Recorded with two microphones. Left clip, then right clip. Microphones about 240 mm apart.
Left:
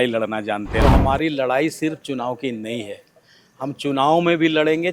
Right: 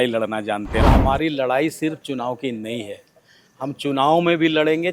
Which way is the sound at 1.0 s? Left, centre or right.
Left.